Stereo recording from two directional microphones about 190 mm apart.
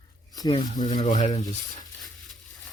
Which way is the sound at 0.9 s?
40° left (ahead or behind).